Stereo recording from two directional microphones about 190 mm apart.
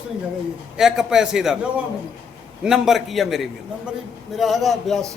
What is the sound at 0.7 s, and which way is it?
A man's voice, 5° right (ahead or behind).